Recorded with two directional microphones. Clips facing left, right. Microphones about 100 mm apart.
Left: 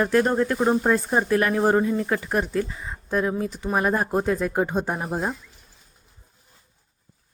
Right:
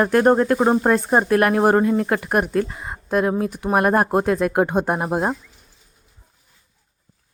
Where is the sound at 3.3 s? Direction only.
55° right (ahead or behind).